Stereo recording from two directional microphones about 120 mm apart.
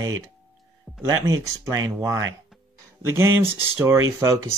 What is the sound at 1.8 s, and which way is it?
Speech, 30° right (ahead or behind).